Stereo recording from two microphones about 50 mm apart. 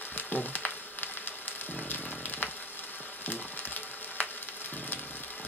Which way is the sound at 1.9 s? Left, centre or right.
Left.